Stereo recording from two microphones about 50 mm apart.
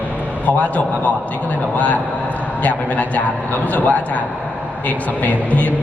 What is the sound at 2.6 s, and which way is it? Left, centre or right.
A man's voice, left.